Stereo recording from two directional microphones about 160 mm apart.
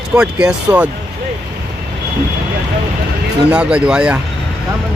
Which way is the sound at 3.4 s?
5° right (ahead or behind).